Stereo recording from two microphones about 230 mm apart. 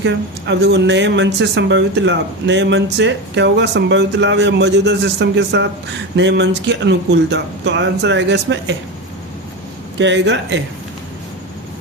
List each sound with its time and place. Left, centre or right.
0.0 s speech: right
10.0 s speech: right